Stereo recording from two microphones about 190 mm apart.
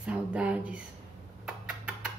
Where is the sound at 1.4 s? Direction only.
5° right (ahead or behind).